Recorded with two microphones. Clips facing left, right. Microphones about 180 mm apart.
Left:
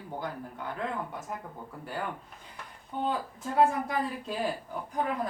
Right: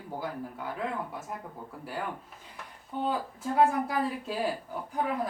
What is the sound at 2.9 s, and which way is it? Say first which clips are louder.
Speech: even; centre (ahead or behind).